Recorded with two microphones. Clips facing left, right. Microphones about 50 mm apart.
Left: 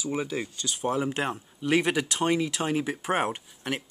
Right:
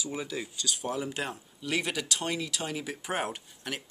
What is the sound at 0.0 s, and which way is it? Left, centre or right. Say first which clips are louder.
Speech: left 5 dB; left.